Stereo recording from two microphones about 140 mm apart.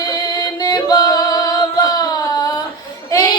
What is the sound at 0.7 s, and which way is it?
Music, 30° left (ahead or behind).